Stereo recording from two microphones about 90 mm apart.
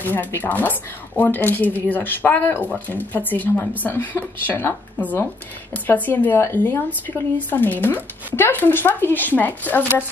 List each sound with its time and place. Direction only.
0.0 s a woman's voice: 20° left (ahead or behind)